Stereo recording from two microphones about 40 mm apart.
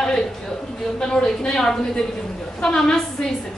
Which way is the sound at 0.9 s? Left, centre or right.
Centre.